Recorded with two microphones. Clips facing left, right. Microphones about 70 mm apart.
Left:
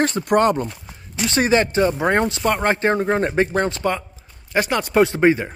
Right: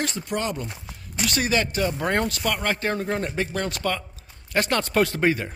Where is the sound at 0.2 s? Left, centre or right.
Left.